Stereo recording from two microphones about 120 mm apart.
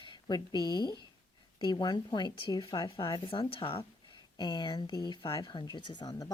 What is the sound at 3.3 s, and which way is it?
Speech, 45° left (ahead or behind).